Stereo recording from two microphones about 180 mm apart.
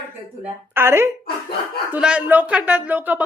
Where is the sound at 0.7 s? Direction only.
10° right (ahead or behind).